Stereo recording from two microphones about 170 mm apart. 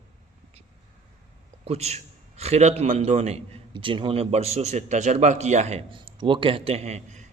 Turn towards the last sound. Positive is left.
turn(degrees=-45)  # may be behind; listen again after turning